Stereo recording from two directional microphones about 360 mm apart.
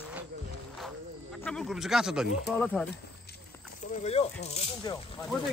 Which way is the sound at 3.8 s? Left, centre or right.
Left.